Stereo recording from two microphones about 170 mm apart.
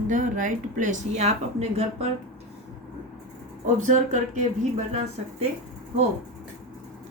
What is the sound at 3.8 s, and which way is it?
Speech, 45° right (ahead or behind).